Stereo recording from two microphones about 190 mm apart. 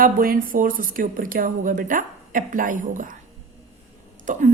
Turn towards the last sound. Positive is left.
turn(degrees=-45)  # may be behind; listen again after turning